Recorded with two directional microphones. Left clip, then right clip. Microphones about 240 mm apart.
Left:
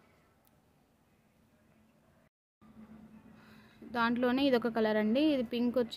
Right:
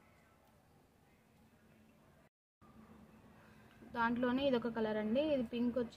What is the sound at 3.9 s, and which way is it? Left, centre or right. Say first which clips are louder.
A woman's voice: left 5 dB; left.